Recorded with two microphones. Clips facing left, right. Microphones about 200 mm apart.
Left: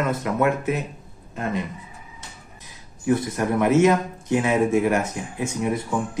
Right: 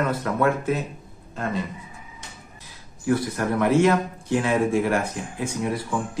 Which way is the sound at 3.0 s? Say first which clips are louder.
Left 1 dB; 20° left (ahead or behind).